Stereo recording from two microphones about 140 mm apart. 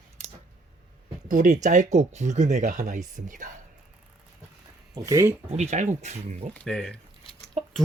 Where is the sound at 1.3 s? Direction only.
65° right (ahead or behind).